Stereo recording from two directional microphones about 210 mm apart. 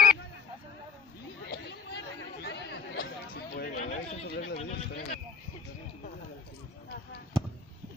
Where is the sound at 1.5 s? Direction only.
55° left (ahead or behind).